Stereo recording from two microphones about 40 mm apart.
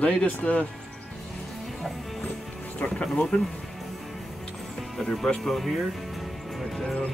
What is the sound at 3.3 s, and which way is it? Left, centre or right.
Speech, left.